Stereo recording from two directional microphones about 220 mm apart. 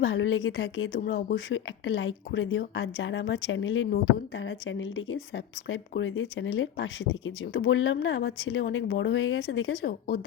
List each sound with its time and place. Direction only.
0.0 s speech: 60° left (ahead or behind)
0.9 s speech: 45° left (ahead or behind)
1.5 s speech: 60° left (ahead or behind)